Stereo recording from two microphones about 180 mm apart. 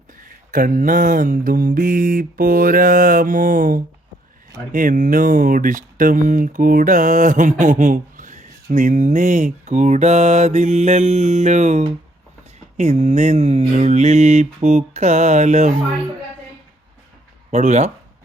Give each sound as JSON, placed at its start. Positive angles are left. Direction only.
{"t": 0.1, "sound": "mantra", "side_deg": -50}
{"t": 7.6, "sound": "speech", "side_deg": -45}
{"t": 17.5, "sound": "speech", "side_deg": -40}